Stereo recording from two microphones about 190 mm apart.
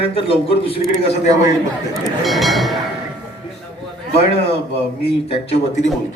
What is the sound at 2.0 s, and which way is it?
Speech, centre (ahead or behind).